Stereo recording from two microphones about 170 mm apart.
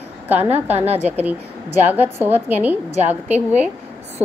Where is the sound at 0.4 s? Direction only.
35° right (ahead or behind).